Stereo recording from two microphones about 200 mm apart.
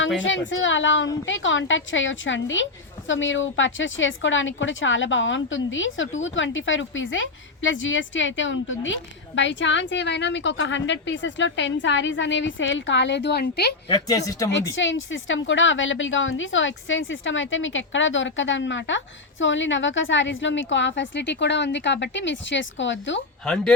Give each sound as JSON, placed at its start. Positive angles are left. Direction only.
{"t": 0.2, "sound": "a woman's voice", "side_deg": 70}
{"t": 13.8, "sound": "speech", "side_deg": 20}
{"t": 14.8, "sound": "a woman's voice", "side_deg": 70}